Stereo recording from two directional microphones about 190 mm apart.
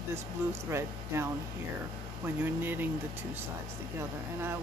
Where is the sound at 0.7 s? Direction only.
15° right (ahead or behind).